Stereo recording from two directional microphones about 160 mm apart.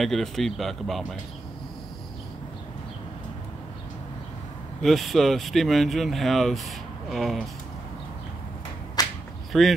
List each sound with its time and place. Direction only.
0.0 s speech: centre (ahead or behind)
4.8 s speech: centre (ahead or behind)
9.0 s whip: 25° left (ahead or behind)
9.5 s speech: centre (ahead or behind)